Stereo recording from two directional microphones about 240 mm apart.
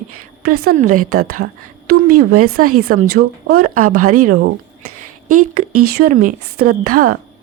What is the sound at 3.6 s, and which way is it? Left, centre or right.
Speech, right.